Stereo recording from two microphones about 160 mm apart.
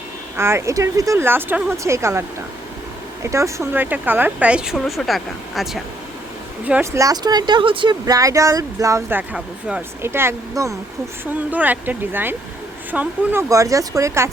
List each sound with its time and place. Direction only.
0.3 s speech: 15° right (ahead or behind)
3.2 s speech: 20° right (ahead or behind)
7.0 s speech: 25° right (ahead or behind)